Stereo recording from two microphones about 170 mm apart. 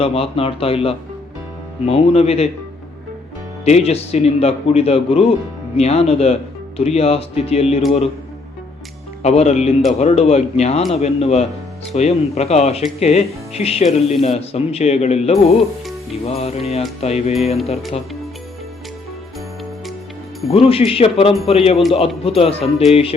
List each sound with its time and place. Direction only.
0.0 s speech: 35° left (ahead or behind)
3.6 s speech: 40° left (ahead or behind)
9.2 s speech: 40° left (ahead or behind)
20.5 s speech: 35° left (ahead or behind)